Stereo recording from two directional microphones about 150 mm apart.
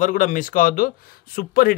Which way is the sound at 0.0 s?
60° left (ahead or behind).